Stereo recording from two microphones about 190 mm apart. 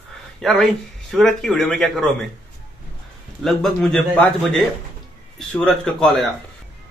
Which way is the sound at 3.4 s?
Centre (ahead or behind).